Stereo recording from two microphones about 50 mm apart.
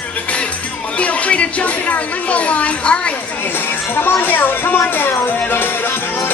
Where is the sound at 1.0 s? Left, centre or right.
Left.